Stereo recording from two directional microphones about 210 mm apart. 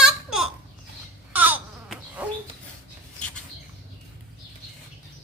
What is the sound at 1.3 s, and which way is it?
Baby cry, 10° right (ahead or behind).